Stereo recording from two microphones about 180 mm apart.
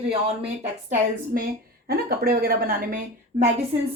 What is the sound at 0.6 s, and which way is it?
A woman's voice, 45° right (ahead or behind).